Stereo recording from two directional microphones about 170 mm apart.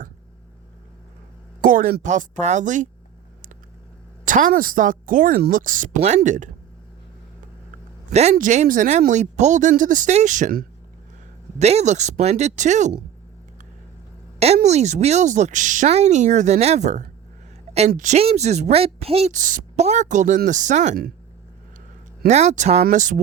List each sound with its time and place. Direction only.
1.6 s a woman's voice: 55° right (ahead or behind)
4.3 s a woman's voice: 50° right (ahead or behind)
8.1 s a woman's voice: 40° right (ahead or behind)
11.6 s a woman's voice: 40° right (ahead or behind)
14.3 s a woman's voice: 40° right (ahead or behind)
22.3 s a woman's voice: 40° right (ahead or behind)